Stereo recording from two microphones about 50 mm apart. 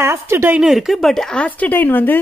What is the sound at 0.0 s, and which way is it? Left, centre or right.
Speech, right.